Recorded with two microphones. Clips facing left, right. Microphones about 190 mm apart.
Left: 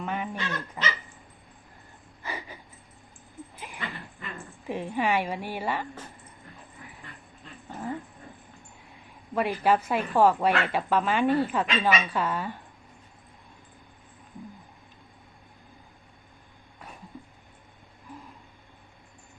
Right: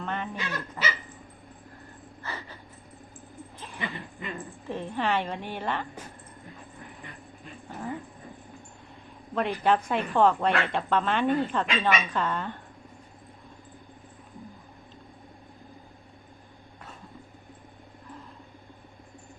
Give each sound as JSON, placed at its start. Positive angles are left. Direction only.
{"t": 0.0, "sound": "dog", "side_deg": 10}
{"t": 2.2, "sound": "a sound", "side_deg": 10}
{"t": 3.4, "sound": "a sound", "side_deg": -10}
{"t": 3.8, "sound": "dog", "side_deg": -15}
{"t": 4.6, "sound": "a woman's voice", "side_deg": 10}
{"t": 9.3, "sound": "a woman's voice", "side_deg": 5}